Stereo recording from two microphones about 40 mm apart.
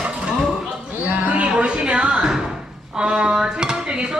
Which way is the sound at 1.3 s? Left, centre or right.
Right.